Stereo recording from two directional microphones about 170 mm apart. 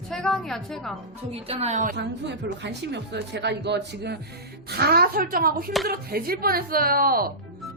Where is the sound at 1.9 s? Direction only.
90° right.